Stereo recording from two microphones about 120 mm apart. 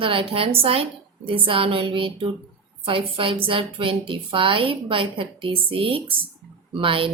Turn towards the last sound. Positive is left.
turn(degrees=-50)  # may be behind; listen again after turning